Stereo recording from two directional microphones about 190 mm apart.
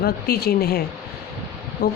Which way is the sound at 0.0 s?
55° left (ahead or behind).